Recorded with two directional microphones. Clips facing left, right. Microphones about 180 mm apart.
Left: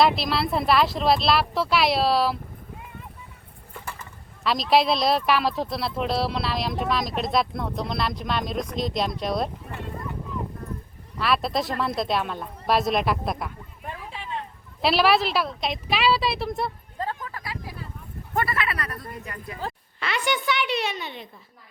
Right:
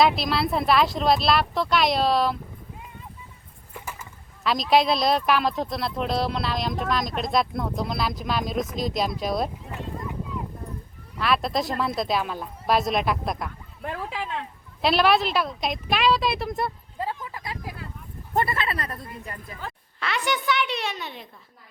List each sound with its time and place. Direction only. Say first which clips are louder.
0.0 s speech: even; centre (ahead or behind)
3.8 s a sound: even; 5° right (ahead or behind)
4.4 s speech: even; centre (ahead or behind)
11.2 s speech: even; centre (ahead or behind)
13.8 s a sound: right 6 dB; 90° right
14.8 s speech: even; centre (ahead or behind)
17.0 s a sound: even; 10° right (ahead or behind)
18.3 s speech: right 1 dB; 25° right (ahead or behind)
20.0 s speech: even; centre (ahead or behind)